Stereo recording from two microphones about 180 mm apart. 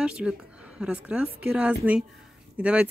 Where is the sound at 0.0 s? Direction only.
5° right (ahead or behind).